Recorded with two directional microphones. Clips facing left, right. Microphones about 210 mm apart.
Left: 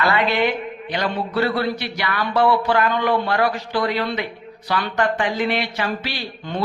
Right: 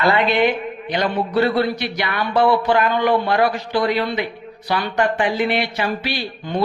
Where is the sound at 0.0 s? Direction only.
20° right (ahead or behind).